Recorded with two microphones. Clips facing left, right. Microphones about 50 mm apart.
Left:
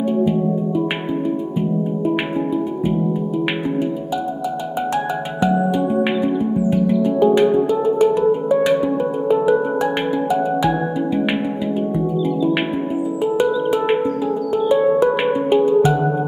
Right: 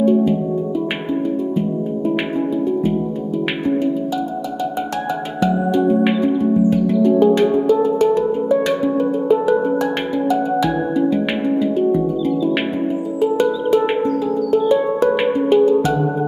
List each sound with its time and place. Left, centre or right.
0.0 s music: centre
5.4 s music: centre
13.2 s music: centre